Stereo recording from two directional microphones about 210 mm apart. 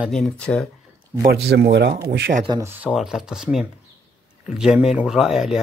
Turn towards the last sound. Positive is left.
turn(degrees=-5)  # may be behind; listen again after turning